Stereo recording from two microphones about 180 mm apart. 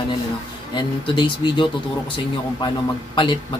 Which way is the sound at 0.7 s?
25° left (ahead or behind).